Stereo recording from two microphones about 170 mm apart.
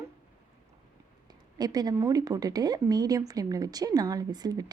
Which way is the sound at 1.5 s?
25° right (ahead or behind).